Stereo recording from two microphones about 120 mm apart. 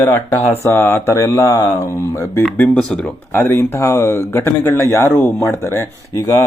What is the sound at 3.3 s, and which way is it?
Speech, 20° left (ahead or behind).